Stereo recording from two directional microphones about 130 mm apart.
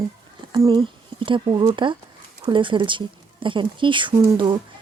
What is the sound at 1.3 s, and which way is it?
Speech, 40° right (ahead or behind).